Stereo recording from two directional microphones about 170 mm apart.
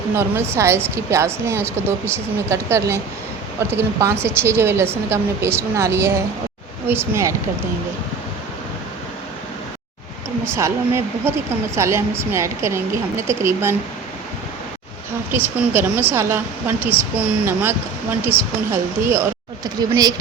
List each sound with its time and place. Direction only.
0.2 s speech: 15° right (ahead or behind)
10.4 s speech: 15° right (ahead or behind)
15.3 s speech: 10° right (ahead or behind)